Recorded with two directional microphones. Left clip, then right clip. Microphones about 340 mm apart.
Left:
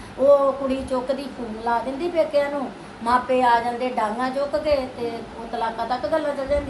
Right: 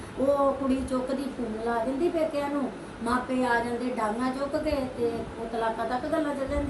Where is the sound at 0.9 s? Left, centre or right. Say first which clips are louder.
Left 5 dB; centre.